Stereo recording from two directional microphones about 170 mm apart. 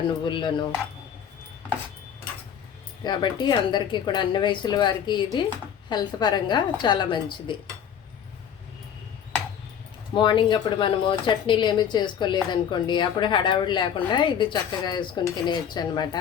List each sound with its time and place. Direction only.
0.3 s a woman's voice: 30° left (ahead or behind)
3.0 s a woman's voice: 25° left (ahead or behind)
10.2 s a woman's voice: 30° left (ahead or behind)